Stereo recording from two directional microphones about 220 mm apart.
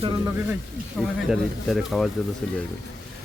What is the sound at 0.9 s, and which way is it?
Speech, centre (ahead or behind).